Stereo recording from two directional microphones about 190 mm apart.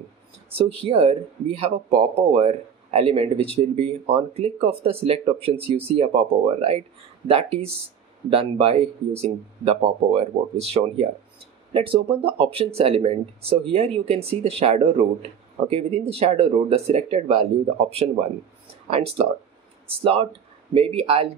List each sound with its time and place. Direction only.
0.5 s speech: 30° right (ahead or behind)